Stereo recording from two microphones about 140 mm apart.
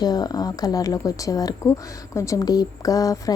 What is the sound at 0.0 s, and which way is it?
A woman's voice, 30° left (ahead or behind).